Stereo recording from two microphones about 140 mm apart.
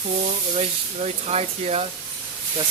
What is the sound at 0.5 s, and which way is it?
Speech, 50° right (ahead or behind).